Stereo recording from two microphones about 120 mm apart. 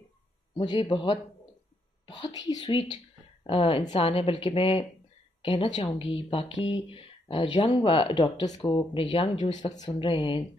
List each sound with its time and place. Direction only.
0.6 s speech: 45° left (ahead or behind)